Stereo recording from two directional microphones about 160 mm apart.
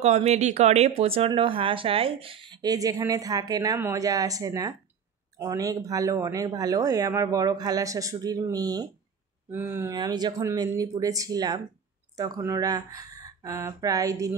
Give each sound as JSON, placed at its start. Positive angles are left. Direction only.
{"t": 0.0, "sound": "speech", "side_deg": -45}
{"t": 9.5, "sound": "speech", "side_deg": -15}
{"t": 9.9, "sound": "speech", "side_deg": -25}